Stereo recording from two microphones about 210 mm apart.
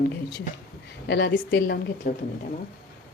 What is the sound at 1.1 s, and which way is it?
Speech, 50° left (ahead or behind).